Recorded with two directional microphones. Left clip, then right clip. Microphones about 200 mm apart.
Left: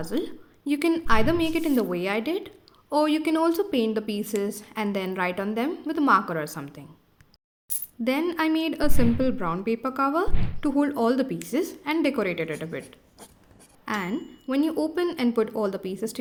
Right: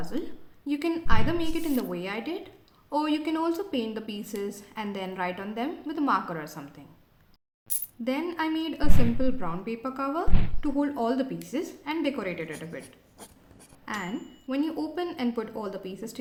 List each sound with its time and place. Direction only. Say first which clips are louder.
0.0 s a woman's voice: left 5 dB; 30° left (ahead or behind)
8.0 s a woman's voice: left 5 dB; 30° left (ahead or behind)
12.8 s zipper: left 2 dB; centre (ahead or behind)
13.8 s a woman's voice: left 5 dB; 30° left (ahead or behind)